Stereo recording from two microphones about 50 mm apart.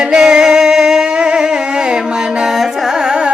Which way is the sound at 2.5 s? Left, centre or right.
Centre.